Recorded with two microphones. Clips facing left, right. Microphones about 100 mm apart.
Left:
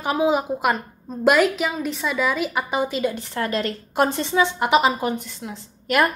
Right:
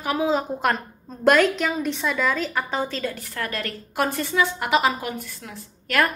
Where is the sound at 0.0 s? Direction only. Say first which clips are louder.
Left 2 dB; 20° left (ahead or behind).